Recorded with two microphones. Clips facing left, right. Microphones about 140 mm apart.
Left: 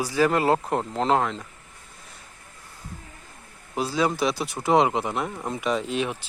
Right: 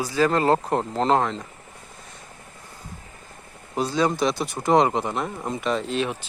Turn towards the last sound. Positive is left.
turn(degrees=10)  # may be behind; listen again after turning